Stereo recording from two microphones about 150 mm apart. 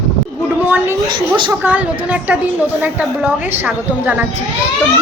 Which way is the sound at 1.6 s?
10° right (ahead or behind).